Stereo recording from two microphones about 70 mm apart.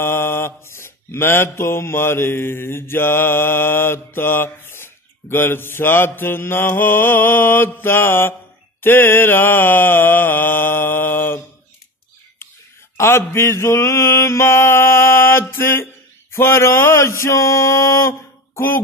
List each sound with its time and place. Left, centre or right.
0.0 s mantra: left
12.9 s mantra: left
16.3 s a sound: left